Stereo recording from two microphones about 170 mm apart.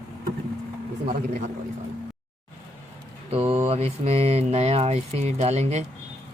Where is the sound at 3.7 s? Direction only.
35° right (ahead or behind).